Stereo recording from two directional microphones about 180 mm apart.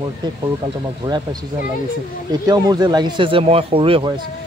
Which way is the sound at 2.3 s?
20° right (ahead or behind).